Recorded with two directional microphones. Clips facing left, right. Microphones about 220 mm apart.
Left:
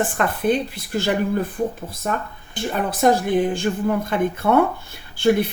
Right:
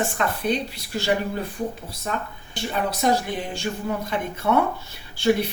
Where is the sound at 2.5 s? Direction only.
50° left (ahead or behind).